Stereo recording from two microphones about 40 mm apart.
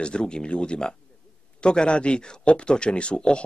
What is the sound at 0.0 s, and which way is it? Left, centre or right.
Speech, left.